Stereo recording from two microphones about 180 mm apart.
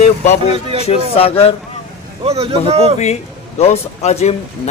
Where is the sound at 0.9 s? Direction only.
35° left (ahead or behind).